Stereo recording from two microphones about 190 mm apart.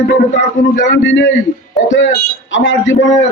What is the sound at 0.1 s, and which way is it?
A man's voice, 75° left (ahead or behind).